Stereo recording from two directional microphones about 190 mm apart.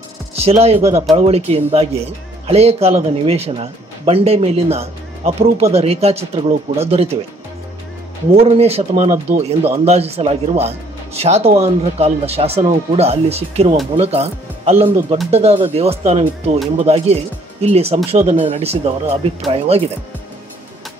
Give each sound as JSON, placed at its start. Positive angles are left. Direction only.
{"t": 0.4, "sound": "speech", "side_deg": -35}
{"t": 8.4, "sound": "speech", "side_deg": -35}